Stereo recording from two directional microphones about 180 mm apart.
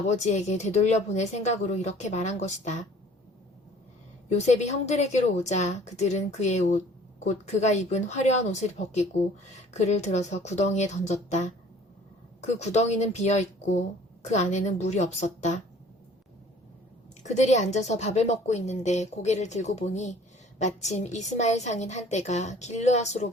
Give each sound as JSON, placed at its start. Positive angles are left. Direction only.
{"t": 0.1, "sound": "a woman's voice", "side_deg": 40}
{"t": 4.3, "sound": "a woman's voice", "side_deg": 40}
{"t": 17.2, "sound": "a woman's voice", "side_deg": 40}